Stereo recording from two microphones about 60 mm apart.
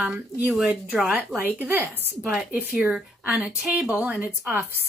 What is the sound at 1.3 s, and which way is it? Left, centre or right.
Speech, right.